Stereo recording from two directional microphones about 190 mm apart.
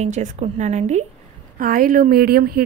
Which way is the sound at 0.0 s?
35° right (ahead or behind).